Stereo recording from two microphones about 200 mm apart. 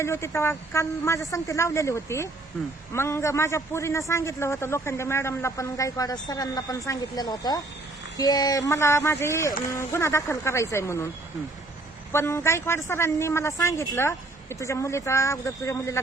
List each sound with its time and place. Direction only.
0.0 s a man's voice: 15° left (ahead or behind)
12.1 s a man's voice: 10° left (ahead or behind)